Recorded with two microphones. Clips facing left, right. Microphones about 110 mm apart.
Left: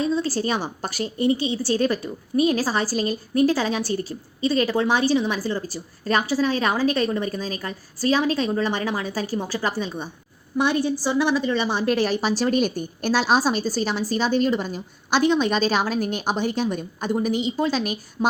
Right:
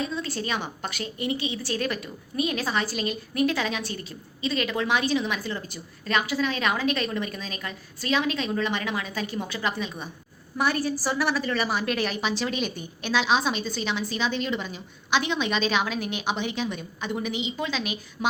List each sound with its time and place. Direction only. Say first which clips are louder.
0.0 s a woman's voice: left 7 dB; 30° left (ahead or behind)
12.4 s a woman's voice: left 8 dB; 45° left (ahead or behind)